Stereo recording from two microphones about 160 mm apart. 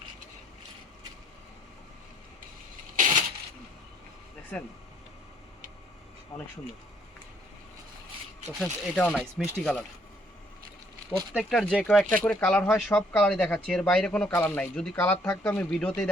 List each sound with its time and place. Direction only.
2.9 s a sound: 55° right (ahead or behind)
4.5 s speech: 5° left (ahead or behind)
8.5 s speech: centre (ahead or behind)
11.3 s speech: 5° left (ahead or behind)